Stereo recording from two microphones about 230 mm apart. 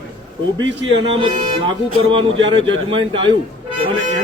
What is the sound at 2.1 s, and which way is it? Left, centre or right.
Speech, right.